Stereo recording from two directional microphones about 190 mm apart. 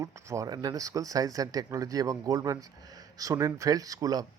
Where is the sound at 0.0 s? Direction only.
15° right (ahead or behind).